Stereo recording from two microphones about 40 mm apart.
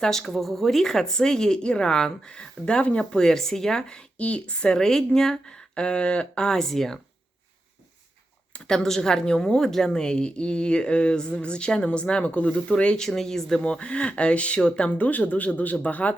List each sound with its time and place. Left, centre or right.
0.0 s a woman's voice: centre; by 4.8 s left
4.8 s a woman's voice: centre
8.7 s a woman's voice: centre
13.1 s a woman's voice: centre
13.6 s a woman's voice: left
14.8 s speech: left